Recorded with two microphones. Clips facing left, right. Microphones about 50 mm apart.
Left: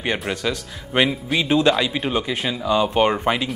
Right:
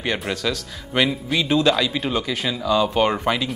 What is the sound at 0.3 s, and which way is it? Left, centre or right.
Speech, centre.